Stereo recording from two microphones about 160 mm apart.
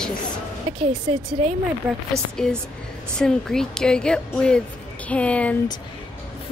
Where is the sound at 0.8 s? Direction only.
40° right (ahead or behind).